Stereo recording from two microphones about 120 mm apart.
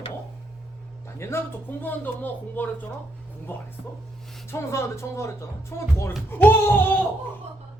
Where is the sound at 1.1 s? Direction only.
20° left (ahead or behind).